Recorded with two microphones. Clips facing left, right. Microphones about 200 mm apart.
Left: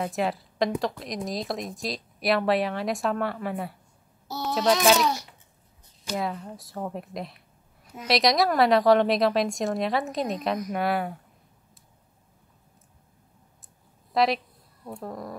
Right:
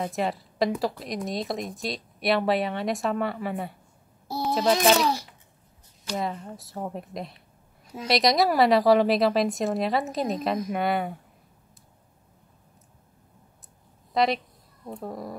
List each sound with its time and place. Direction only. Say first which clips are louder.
0.0 s speech: left 1 dB; centre (ahead or behind)
6.0 s speech: even; centre (ahead or behind)
14.1 s speech: even; centre (ahead or behind)